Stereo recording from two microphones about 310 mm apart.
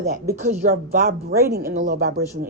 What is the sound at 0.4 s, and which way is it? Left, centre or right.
A woman's voice, right.